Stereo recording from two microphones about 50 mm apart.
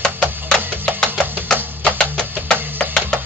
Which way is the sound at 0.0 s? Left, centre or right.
Centre.